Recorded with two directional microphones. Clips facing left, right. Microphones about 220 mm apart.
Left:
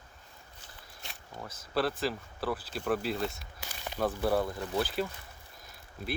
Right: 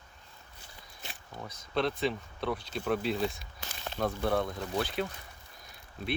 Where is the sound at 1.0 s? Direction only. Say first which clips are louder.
Right 1 dB; centre (ahead or behind).